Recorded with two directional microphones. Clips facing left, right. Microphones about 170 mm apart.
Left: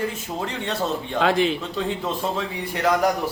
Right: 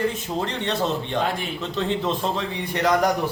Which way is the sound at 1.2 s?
90° left.